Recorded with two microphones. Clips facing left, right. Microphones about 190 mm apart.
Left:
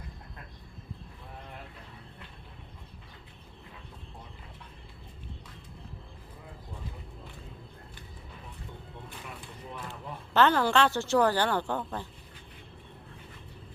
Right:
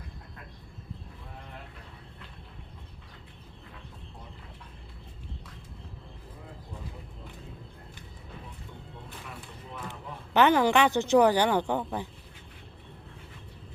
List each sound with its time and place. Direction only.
9.9 s a woman's voice: 15° right (ahead or behind)